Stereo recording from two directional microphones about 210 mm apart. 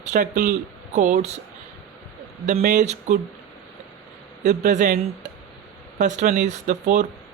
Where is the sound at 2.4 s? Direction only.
35° right (ahead or behind).